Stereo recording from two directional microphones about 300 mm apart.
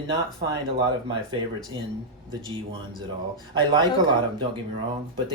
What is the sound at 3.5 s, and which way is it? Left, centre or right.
Speech, centre.